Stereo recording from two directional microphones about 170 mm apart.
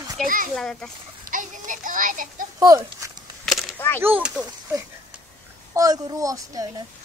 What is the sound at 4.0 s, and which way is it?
Speech, 10° right (ahead or behind).